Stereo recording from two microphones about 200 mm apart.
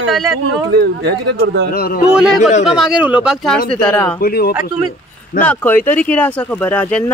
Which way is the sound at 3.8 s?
10° left (ahead or behind).